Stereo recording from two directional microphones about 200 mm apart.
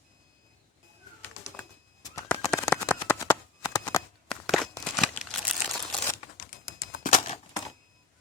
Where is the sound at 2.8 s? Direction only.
15° left (ahead or behind).